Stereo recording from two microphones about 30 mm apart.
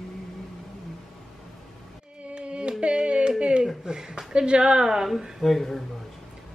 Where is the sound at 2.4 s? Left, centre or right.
Right.